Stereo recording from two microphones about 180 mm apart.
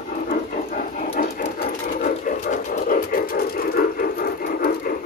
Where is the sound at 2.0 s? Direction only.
50° left (ahead or behind).